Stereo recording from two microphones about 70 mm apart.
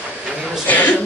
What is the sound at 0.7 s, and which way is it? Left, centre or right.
Speech, left.